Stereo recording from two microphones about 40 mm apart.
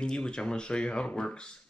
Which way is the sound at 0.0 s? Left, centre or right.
Left.